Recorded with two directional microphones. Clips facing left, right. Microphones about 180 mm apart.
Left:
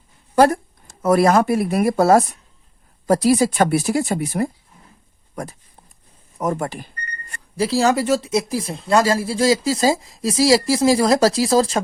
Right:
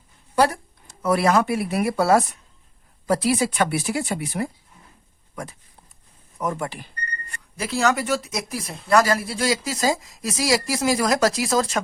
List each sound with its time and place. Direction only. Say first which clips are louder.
0.3 s speech: left 5 dB; 45° left (ahead or behind)
7.5 s speech: left 5 dB; 30° left (ahead or behind)